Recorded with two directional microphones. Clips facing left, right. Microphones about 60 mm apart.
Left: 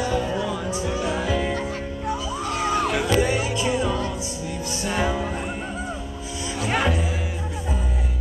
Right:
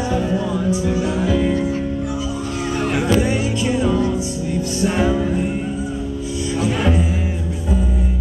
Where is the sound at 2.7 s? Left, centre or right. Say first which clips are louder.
Right 4 dB; right.